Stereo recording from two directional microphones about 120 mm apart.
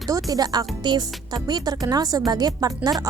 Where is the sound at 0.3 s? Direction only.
35° right (ahead or behind).